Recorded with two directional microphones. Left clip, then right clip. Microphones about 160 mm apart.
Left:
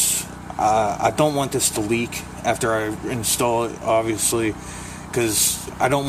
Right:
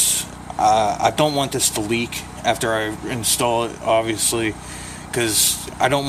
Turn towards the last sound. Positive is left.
turn(degrees=5)  # may be behind; listen again after turning